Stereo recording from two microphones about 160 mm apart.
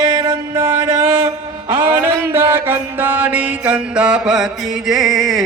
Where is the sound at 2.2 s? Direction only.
15° right (ahead or behind).